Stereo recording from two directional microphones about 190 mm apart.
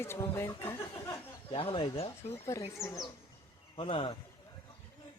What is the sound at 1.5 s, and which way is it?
Speech, 25° left (ahead or behind).